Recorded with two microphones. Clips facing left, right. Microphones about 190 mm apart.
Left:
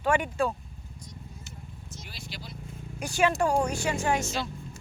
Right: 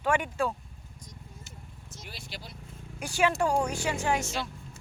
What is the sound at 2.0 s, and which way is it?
Vehicle, 55° right (ahead or behind).